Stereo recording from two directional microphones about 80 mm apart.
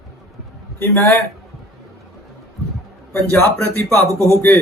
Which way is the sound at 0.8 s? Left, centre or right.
Left.